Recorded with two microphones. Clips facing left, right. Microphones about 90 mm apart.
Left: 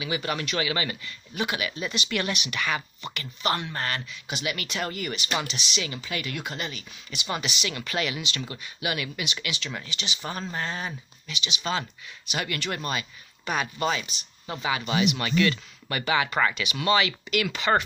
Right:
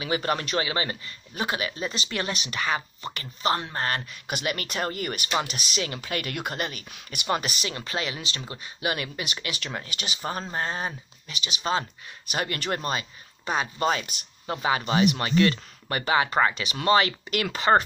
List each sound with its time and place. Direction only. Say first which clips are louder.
0.0 s a man's voice: right 3 dB; 45° right (ahead or behind)
4.0 s speech: right 2 dB; 50° right (ahead or behind); by 8.9 s 30° right (ahead or behind)
8.9 s a man's voice: even; 40° right (ahead or behind)
13.8 s a man's voice: right 2 dB; 50° right (ahead or behind)